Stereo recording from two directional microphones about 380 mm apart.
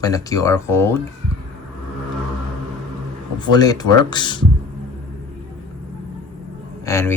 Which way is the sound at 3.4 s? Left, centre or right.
Centre.